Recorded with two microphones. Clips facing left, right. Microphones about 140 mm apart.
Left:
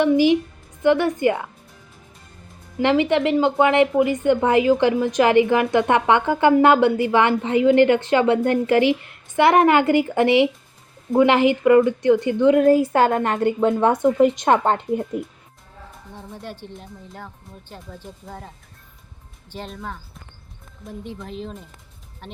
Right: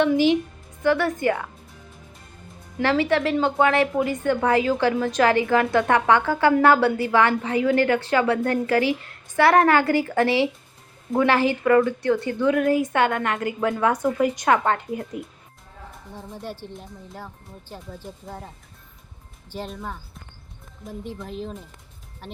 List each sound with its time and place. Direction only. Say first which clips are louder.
0.8 s speech: left 4 dB; 15° left (ahead or behind)
2.8 s a woman's voice: left 3 dB; 20° left (ahead or behind)
12.6 s a woman's voice: left 5 dB; 35° left (ahead or behind)
16.1 s speech: right 1 dB; 10° right (ahead or behind)
21.2 s speech: even; centre (ahead or behind)